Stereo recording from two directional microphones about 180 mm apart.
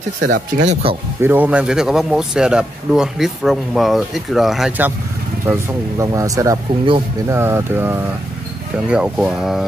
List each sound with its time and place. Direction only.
0.2 s speech: 80° right
1.2 s speech: 10° right (ahead or behind)
5.5 s speech: 15° right (ahead or behind)